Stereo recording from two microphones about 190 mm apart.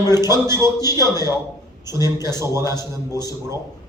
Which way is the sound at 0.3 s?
15° right (ahead or behind).